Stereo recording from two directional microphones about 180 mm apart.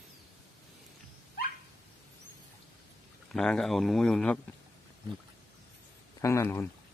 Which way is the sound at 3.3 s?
5° left (ahead or behind).